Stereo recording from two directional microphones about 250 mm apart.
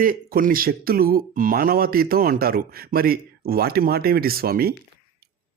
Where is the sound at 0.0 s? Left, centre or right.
Right.